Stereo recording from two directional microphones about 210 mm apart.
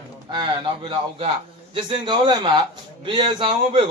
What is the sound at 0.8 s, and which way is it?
A man's voice, 25° right (ahead or behind).